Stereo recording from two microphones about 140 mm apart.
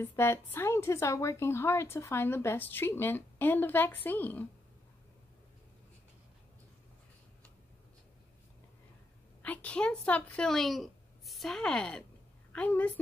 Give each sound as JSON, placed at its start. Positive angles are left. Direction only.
{"t": 0.0, "sound": "a woman's voice", "side_deg": 20}
{"t": 9.4, "sound": "a woman's voice", "side_deg": 10}